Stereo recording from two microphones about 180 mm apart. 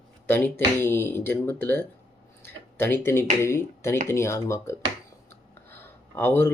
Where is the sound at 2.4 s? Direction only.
10° left (ahead or behind).